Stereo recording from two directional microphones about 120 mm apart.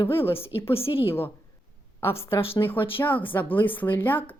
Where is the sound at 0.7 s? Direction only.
50° left (ahead or behind).